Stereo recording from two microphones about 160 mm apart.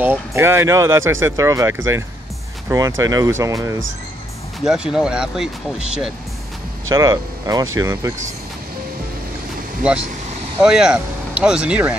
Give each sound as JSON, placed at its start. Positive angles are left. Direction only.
{"t": 0.0, "sound": "speech", "side_deg": -15}
{"t": 4.6, "sound": "speech", "side_deg": -5}
{"t": 6.9, "sound": "speech", "side_deg": -20}
{"t": 10.6, "sound": "speech", "side_deg": -5}